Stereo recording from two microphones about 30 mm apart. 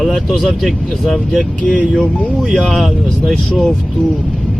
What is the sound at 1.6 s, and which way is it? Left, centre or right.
Speech, left.